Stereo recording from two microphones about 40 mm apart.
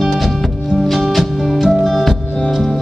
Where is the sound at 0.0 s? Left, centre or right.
Centre.